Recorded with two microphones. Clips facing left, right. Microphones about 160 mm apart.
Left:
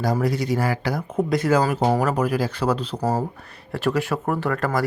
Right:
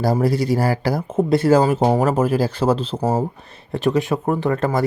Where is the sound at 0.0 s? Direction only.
30° right (ahead or behind).